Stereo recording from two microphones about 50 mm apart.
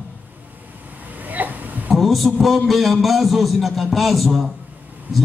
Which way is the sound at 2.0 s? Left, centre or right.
Centre.